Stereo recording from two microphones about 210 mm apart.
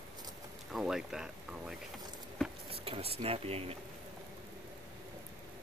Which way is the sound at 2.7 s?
25° right (ahead or behind).